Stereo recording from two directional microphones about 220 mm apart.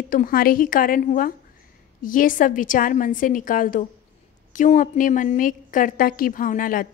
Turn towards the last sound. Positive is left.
turn(degrees=40)  # may be behind; listen again after turning